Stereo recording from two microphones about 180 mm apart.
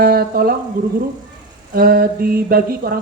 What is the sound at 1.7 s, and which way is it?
A woman's voice, 55° right (ahead or behind).